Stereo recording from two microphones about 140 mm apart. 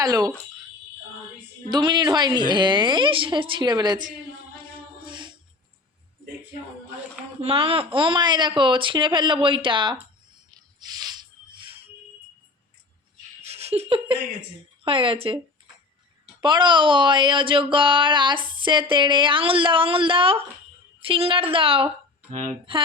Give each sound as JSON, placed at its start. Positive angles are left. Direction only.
{"t": 0.0, "sound": "speech", "side_deg": -25}
{"t": 1.7, "sound": "speech", "side_deg": -30}
{"t": 5.0, "sound": "music", "side_deg": -35}
{"t": 7.4, "sound": "speech", "side_deg": -40}
{"t": 10.5, "sound": "music", "side_deg": -30}
{"t": 13.5, "sound": "laughter", "side_deg": -50}
{"t": 14.8, "sound": "speech", "side_deg": -40}
{"t": 16.4, "sound": "speech", "side_deg": -35}